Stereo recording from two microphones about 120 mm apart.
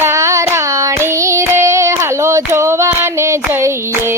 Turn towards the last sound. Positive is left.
turn(degrees=-25)  # may be behind; listen again after turning